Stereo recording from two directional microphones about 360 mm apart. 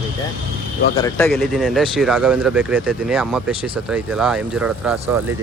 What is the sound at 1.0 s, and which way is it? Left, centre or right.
Speech, centre.